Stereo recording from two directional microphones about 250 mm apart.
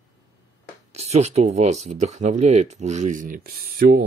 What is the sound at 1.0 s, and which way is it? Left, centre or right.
Speech, right.